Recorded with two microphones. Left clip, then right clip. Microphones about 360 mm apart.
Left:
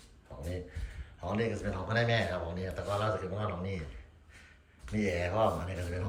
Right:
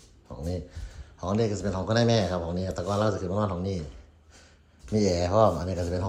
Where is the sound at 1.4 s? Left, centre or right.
Centre.